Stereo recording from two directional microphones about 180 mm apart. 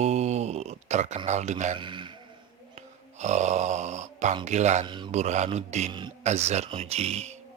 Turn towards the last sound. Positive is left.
turn(degrees=-35)  # may be behind; listen again after turning